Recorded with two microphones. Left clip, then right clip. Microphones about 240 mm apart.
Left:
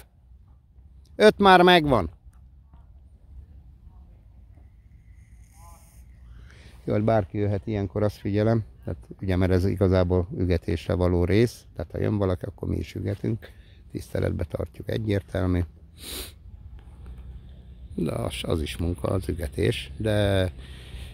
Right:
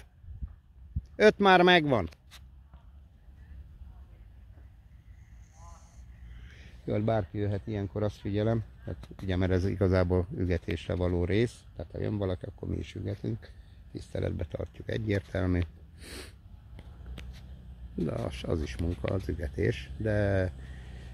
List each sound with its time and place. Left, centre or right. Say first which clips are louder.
1.1 s speech: left 5 dB; centre
6.4 s speech: left 6 dB; centre
18.0 s speech: left 5 dB; centre